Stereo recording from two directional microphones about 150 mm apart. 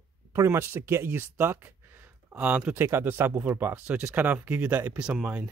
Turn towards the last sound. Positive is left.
turn(degrees=-10)  # may be behind; listen again after turning